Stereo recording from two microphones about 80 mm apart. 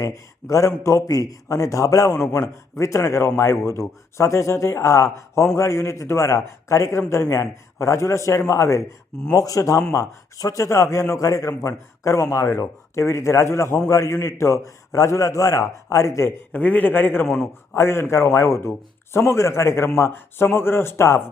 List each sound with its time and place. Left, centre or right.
0.4 s a man's voice: left
16.5 s a man's voice: left
17.2 s a man's voice: centre
17.7 s a man's voice: left